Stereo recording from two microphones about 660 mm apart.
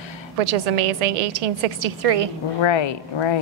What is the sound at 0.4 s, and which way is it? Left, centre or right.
A woman's voice, right.